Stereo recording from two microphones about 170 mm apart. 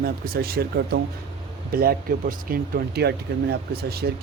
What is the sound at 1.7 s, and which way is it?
Speech, 60° right (ahead or behind).